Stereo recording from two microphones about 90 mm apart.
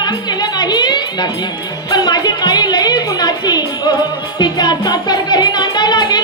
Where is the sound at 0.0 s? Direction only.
50° left (ahead or behind).